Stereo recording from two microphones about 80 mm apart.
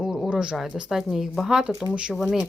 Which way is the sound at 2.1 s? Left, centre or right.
Centre.